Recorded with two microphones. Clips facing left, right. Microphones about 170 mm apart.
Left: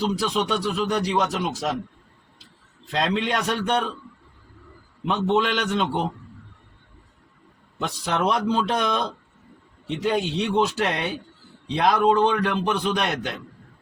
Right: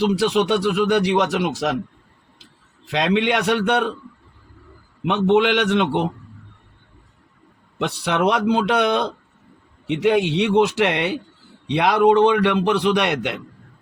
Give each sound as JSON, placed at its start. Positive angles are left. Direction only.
{"t": 0.0, "sound": "speech", "side_deg": -75}
{"t": 2.9, "sound": "speech", "side_deg": -75}
{"t": 5.3, "sound": "speech", "side_deg": -75}
{"t": 7.8, "sound": "speech", "side_deg": -75}